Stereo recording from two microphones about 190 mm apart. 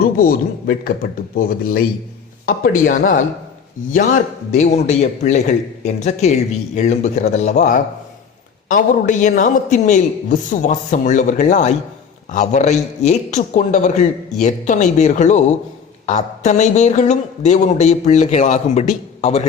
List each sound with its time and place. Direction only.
0.0 s a man's voice: 50° left (ahead or behind)